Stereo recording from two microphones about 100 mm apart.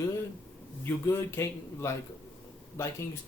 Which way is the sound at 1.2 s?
25° left (ahead or behind).